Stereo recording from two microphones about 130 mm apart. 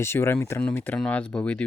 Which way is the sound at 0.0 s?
20° left (ahead or behind).